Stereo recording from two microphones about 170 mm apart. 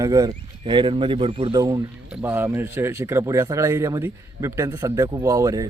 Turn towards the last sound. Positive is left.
turn(degrees=-20)  # may be behind; listen again after turning